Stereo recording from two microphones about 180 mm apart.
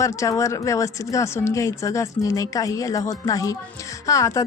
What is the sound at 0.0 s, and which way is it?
Speech, 15° left (ahead or behind).